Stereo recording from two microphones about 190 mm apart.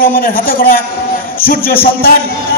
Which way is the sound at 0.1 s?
50° left (ahead or behind).